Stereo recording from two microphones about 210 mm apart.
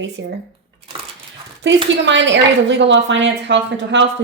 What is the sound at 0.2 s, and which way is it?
Speech, 60° right (ahead or behind).